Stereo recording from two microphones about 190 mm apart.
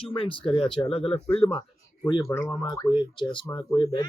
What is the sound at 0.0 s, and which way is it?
Speech, 30° left (ahead or behind).